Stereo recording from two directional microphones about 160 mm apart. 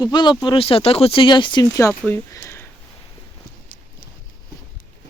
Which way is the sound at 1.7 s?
15° left (ahead or behind).